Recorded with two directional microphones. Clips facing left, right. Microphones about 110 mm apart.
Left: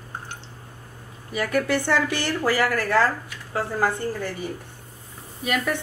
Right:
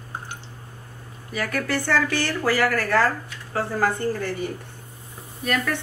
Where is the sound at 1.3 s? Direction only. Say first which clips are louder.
Left 3 dB; 15° left (ahead or behind).